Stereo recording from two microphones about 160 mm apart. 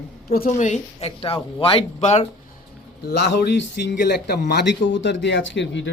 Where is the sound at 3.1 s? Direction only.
90° left.